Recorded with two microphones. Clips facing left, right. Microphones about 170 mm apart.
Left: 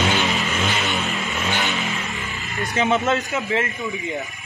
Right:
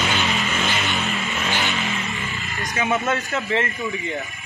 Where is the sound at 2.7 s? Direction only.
20° left (ahead or behind).